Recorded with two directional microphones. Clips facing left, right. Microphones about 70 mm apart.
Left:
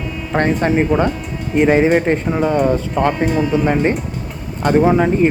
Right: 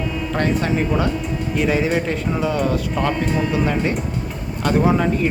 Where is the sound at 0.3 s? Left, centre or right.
Left.